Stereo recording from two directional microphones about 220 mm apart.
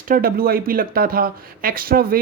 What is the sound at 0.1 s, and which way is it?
Speech, 40° right (ahead or behind).